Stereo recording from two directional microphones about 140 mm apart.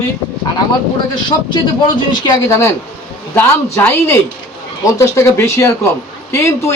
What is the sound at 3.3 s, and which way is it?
Speech, 15° left (ahead or behind).